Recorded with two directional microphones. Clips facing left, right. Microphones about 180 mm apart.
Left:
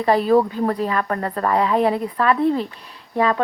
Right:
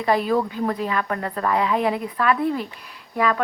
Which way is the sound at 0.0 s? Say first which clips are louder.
Left 4 dB; 35° left (ahead or behind).